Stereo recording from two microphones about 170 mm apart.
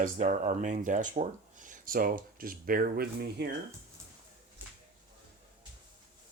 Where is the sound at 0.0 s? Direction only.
45° right (ahead or behind); by 3.5 s 70° right (ahead or behind).